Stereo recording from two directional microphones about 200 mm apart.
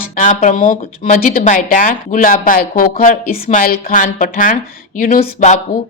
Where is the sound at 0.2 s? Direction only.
40° left (ahead or behind).